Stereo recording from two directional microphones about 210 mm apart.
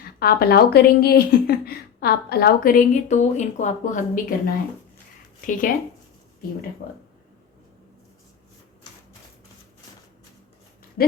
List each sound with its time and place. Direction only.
0.0 s a woman's voice: 45° left (ahead or behind)
11.0 s speech: 45° left (ahead or behind)